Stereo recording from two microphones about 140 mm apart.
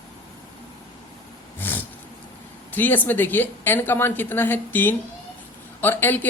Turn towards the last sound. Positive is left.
turn(degrees=15)  # may be behind; listen again after turning